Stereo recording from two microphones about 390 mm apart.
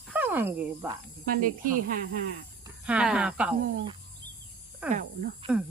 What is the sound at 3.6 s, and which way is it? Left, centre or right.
Speech, centre.